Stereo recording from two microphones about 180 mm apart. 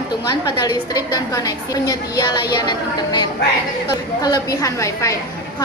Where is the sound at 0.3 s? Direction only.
20° left (ahead or behind).